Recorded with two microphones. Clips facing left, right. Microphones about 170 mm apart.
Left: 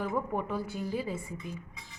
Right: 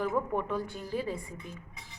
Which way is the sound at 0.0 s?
5° left (ahead or behind).